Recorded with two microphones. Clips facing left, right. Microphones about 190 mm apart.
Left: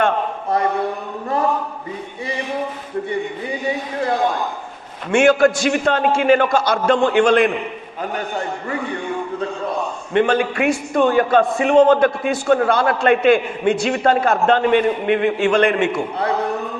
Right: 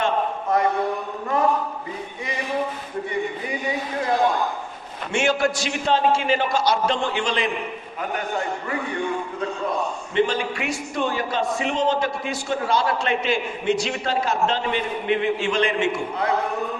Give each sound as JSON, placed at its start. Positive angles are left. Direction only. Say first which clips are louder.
{"t": 5.1, "sound": "a man's voice", "louder": "left 8 dB", "side_deg": 55}
{"t": 10.2, "sound": "a man's voice", "louder": "left 6 dB", "side_deg": 55}